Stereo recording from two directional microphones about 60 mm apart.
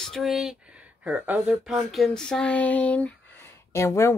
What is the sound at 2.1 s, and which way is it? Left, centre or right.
Speech, centre.